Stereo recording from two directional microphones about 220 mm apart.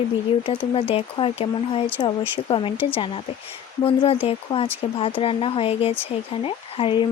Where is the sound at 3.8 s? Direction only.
25° left (ahead or behind).